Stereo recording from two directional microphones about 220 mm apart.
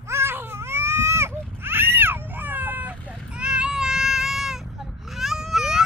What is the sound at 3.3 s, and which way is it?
Baby cry, 5° right (ahead or behind).